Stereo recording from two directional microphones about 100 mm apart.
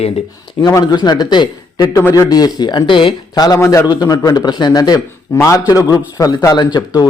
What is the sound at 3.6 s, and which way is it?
Speech, 30° left (ahead or behind).